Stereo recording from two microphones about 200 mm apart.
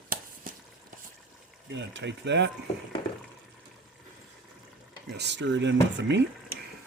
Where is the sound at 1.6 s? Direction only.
65° right (ahead or behind).